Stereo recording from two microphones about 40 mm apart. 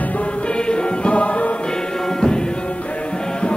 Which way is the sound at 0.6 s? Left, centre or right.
Left.